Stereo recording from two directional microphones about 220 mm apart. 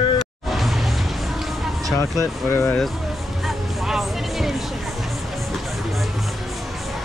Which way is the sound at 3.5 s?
Centre (ahead or behind).